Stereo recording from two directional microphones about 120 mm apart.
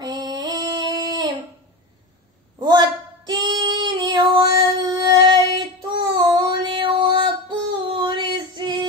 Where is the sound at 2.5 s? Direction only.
35° right (ahead or behind).